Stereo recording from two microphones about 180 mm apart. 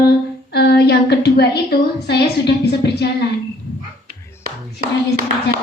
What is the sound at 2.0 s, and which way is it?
Speech, 65° left (ahead or behind).